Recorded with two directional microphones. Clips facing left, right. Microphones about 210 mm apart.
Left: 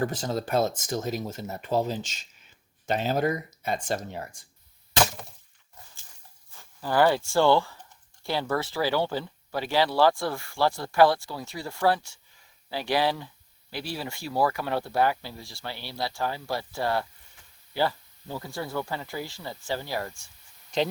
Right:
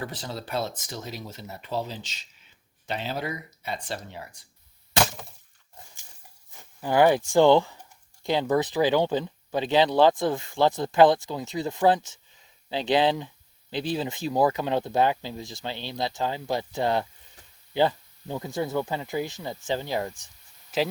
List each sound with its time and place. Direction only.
0.0 s speech: 45° left (ahead or behind)
6.6 s speech: 15° right (ahead or behind)
20.7 s speech: 5° right (ahead or behind)